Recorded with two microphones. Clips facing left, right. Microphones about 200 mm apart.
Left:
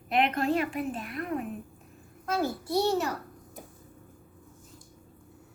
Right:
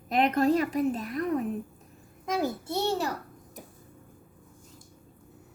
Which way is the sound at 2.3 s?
15° right (ahead or behind).